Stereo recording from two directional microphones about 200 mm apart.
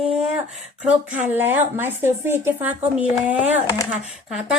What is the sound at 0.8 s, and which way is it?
A woman's voice, 10° right (ahead or behind).